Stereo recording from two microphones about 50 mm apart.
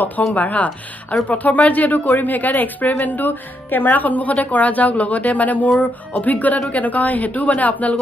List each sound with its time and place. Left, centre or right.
0.3 s a woman's voice: left